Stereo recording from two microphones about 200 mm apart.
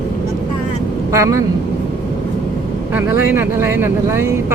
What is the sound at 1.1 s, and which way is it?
Speech, 15° right (ahead or behind).